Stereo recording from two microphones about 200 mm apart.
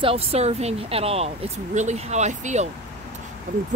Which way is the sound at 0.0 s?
30° right (ahead or behind).